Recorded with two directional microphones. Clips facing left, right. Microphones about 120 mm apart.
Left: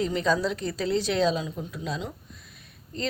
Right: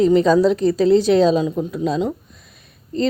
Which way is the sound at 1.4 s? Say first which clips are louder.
Right 13 dB; 45° right (ahead or behind).